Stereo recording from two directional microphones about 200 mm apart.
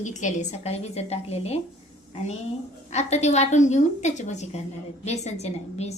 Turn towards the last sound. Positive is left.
turn(degrees=35)  # may be behind; listen again after turning